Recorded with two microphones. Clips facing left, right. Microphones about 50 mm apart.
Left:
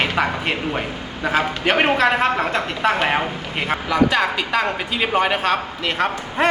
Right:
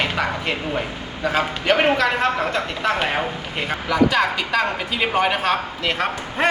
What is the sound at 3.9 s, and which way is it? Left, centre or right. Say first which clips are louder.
Speech: even; centre.